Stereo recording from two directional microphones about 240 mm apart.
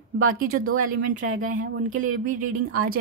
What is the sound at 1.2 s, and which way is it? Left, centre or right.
Speech, right.